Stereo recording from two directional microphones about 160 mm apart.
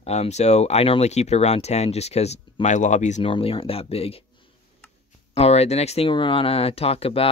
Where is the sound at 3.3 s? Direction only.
35° left (ahead or behind).